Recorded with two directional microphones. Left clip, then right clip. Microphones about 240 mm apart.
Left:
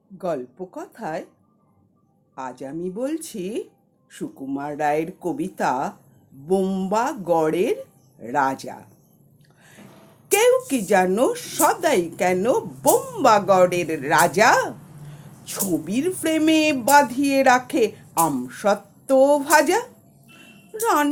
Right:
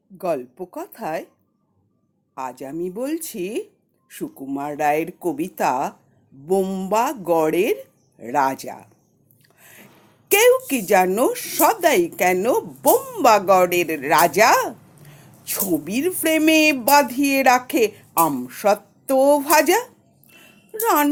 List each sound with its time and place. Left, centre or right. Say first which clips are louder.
0.2 s speech: right 3 dB; right
2.3 s speech: right 2 dB; right
10.2 s speech: right 2 dB; right